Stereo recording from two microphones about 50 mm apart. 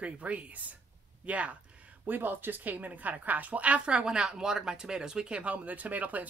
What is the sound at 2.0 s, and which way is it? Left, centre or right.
A woman's voice, right.